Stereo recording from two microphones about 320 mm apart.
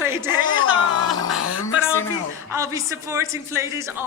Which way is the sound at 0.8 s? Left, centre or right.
Left.